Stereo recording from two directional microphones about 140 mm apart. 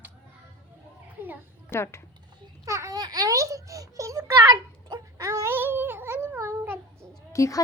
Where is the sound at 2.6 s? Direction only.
20° right (ahead or behind).